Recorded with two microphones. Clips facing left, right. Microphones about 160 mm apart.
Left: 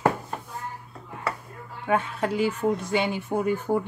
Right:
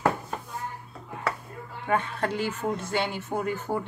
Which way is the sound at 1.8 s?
10° left (ahead or behind).